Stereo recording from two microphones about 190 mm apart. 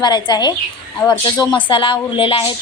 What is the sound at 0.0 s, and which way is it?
Speech, 25° left (ahead or behind).